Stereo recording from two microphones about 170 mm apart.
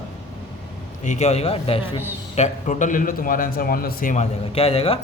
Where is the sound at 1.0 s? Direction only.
40° left (ahead or behind).